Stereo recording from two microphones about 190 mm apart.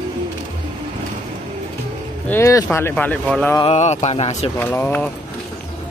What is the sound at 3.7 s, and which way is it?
Speech, 35° left (ahead or behind).